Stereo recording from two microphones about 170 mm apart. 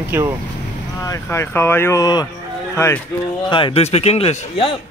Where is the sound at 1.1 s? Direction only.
15° left (ahead or behind).